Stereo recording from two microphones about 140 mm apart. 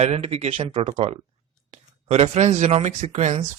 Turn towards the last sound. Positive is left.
turn(degrees=-55)  # may be behind; listen again after turning